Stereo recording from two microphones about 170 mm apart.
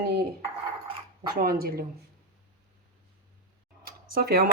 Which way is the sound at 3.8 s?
65° right (ahead or behind).